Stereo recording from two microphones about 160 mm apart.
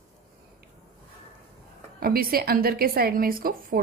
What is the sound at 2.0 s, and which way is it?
A woman's voice, 70° right (ahead or behind).